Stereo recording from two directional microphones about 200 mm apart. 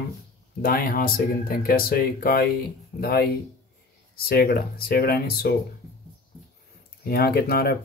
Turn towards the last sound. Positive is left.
turn(degrees=50)  # may be behind; listen again after turning